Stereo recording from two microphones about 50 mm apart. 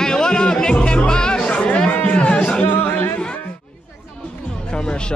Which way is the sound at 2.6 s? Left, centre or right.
Left.